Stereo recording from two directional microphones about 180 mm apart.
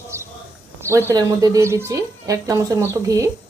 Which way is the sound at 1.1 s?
20° right (ahead or behind).